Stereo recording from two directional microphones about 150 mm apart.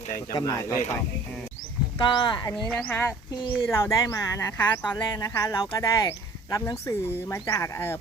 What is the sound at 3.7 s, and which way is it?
Speech, 20° left (ahead or behind).